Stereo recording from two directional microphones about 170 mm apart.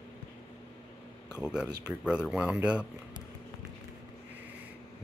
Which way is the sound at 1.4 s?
5° right (ahead or behind).